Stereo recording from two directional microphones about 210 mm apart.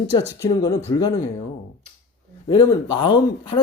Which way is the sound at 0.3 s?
15° left (ahead or behind).